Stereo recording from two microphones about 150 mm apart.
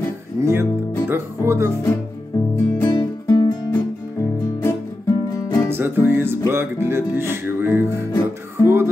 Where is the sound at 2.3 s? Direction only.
20° left (ahead or behind).